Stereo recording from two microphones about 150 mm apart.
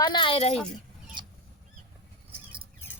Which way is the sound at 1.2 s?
30° right (ahead or behind).